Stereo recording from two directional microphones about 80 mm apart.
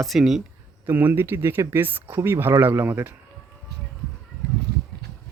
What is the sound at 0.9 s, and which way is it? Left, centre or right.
Speech, right.